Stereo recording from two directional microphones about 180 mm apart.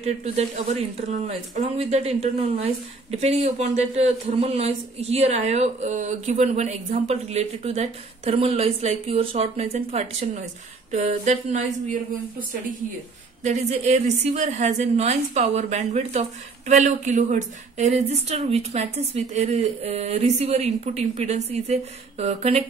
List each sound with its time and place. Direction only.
0.0 s speech: 35° right (ahead or behind)